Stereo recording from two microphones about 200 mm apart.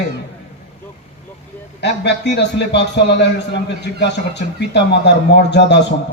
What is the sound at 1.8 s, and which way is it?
A man's voice, 60° left (ahead or behind).